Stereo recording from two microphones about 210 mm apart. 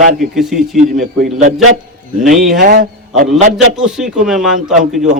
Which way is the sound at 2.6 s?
40° right (ahead or behind).